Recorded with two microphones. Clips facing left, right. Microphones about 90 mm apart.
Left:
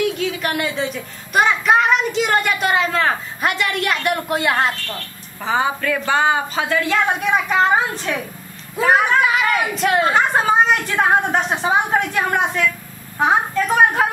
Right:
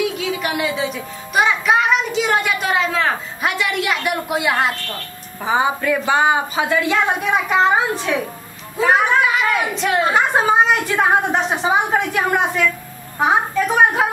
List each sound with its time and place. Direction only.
0.0 s speech: centre (ahead or behind)
5.4 s a woman's voice: 15° right (ahead or behind)
7.9 s speech: 15° right (ahead or behind)
8.7 s a woman's voice: centre (ahead or behind)